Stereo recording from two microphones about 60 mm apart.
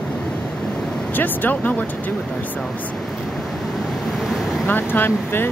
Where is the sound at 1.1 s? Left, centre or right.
Left.